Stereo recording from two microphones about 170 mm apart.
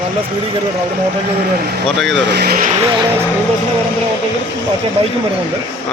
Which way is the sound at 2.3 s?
65° right (ahead or behind).